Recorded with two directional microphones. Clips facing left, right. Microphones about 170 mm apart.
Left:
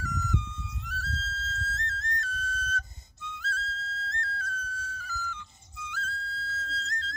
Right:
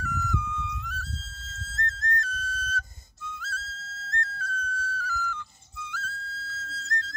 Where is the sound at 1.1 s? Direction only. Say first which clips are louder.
Left 6 dB; 20° right (ahead or behind).